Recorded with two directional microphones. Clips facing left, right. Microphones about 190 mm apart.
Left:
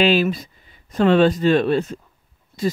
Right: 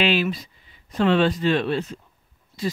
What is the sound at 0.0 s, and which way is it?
Speech, 40° left (ahead or behind).